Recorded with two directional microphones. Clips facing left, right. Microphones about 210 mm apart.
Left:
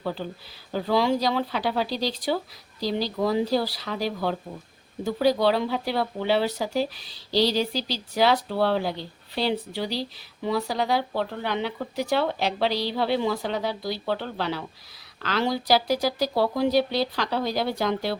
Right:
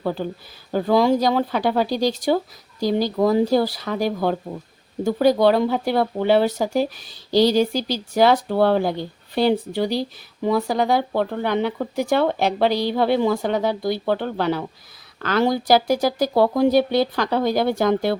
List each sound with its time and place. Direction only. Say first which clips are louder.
0.0 s speech: right 6 dB; 50° right (ahead or behind)